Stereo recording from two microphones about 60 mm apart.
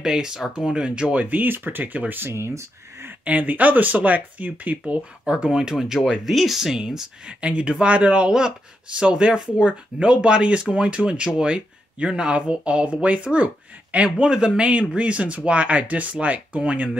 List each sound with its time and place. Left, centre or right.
0.0 s speech: centre; by 3.2 s right
3.3 s speech: right